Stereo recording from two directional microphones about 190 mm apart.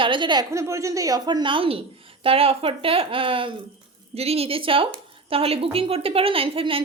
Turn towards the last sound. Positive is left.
turn(degrees=-30)  # may be behind; listen again after turning